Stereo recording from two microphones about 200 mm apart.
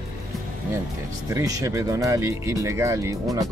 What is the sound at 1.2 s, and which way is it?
Speech, 15° right (ahead or behind).